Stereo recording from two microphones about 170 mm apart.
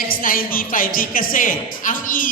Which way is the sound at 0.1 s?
55° left (ahead or behind).